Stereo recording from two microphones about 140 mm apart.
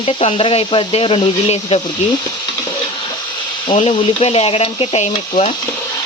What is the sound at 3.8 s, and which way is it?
Speech, 35° left (ahead or behind).